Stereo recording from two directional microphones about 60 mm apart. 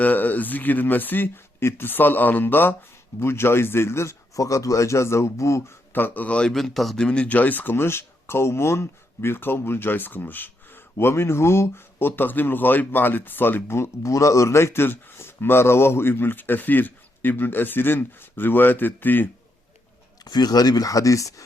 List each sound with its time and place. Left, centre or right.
0.0 s speech: left
5.9 s speech: left
6.5 s a man's voice: centre
7.3 s speech: left
10.9 s speech: left
20.2 s speech: left